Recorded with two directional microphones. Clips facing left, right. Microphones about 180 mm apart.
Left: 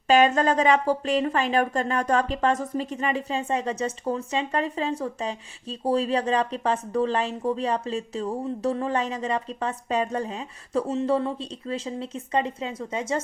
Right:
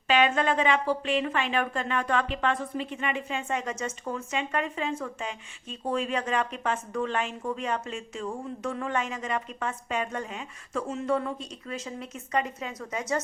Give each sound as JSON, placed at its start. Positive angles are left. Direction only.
{"t": 0.1, "sound": "speech", "side_deg": 40}